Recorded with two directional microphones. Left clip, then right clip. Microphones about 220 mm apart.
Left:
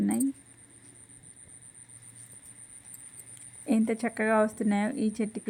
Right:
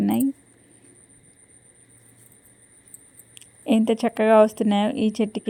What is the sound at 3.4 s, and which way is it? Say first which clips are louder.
Speech: right 7 dB; 25° right (ahead or behind).